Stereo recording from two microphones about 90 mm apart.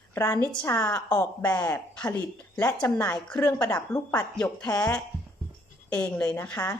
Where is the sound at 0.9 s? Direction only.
35° left (ahead or behind).